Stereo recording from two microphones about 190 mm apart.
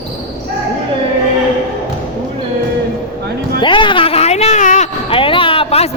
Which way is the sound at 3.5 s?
25° left (ahead or behind).